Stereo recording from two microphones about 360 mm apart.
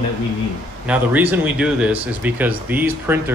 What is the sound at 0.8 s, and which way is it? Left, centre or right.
Speech, centre.